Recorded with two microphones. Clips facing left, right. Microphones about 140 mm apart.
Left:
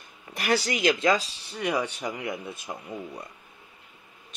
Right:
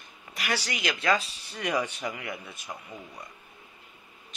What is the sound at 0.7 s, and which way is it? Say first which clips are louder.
Speech: left 8 dB; 40° left (ahead or behind).